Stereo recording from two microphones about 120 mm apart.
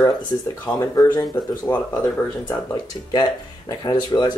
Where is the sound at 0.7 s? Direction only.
30° left (ahead or behind).